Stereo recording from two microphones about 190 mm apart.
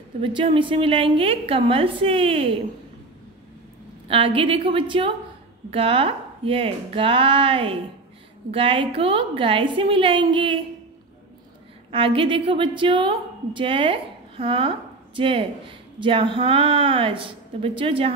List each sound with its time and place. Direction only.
0.2 s a woman's voice: 25° right (ahead or behind)
4.1 s a woman's voice: 30° right (ahead or behind)
11.9 s a woman's voice: 30° right (ahead or behind)